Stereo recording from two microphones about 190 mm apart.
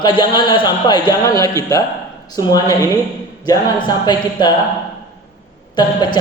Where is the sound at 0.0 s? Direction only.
25° left (ahead or behind).